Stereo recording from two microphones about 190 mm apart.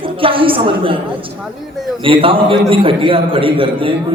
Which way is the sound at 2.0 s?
30° right (ahead or behind).